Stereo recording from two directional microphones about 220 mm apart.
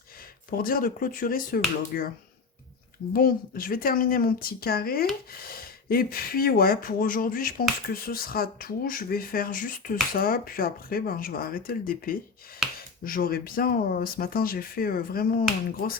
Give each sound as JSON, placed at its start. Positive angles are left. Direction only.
{"t": 0.5, "sound": "speech", "side_deg": 40}
{"t": 3.1, "sound": "speech", "side_deg": 40}